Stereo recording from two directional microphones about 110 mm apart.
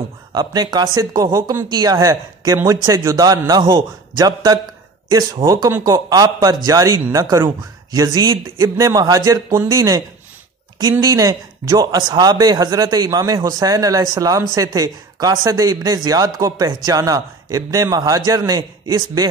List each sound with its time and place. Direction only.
0.3 s speech: 40° right (ahead or behind)